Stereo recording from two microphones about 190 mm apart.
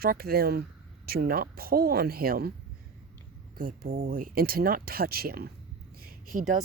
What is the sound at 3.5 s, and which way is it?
Speech, 50° right (ahead or behind).